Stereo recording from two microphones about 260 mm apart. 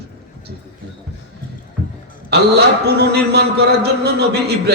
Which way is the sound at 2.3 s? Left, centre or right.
Right.